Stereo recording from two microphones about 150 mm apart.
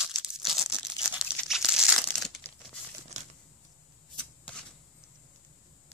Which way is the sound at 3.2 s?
50° right (ahead or behind).